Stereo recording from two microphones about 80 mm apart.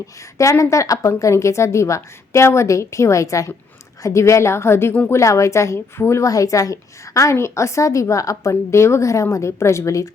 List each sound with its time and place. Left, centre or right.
0.3 s a woman's voice: left